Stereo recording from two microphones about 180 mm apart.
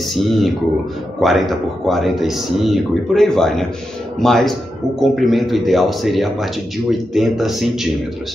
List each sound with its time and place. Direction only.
0.1 s a man's voice: centre (ahead or behind)